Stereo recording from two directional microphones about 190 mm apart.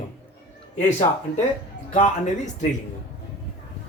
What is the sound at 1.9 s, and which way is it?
Speech, 40° left (ahead or behind).